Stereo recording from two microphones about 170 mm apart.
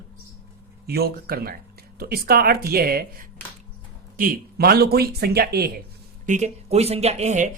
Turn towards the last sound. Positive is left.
turn(degrees=-40)  # may be behind; listen again after turning